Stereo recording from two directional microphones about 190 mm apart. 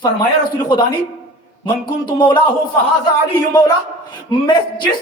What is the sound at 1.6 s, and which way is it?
Speech, 20° left (ahead or behind).